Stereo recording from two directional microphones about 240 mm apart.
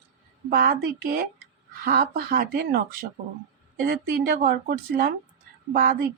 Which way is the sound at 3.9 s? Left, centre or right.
Right.